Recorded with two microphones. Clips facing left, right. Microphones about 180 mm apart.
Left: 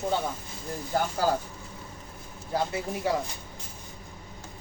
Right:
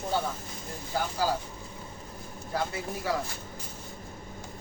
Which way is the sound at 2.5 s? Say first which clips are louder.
Left 3 dB; 25° left (ahead or behind).